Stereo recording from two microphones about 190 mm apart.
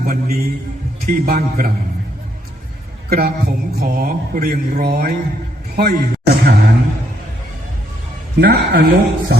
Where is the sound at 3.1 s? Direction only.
55° right (ahead or behind).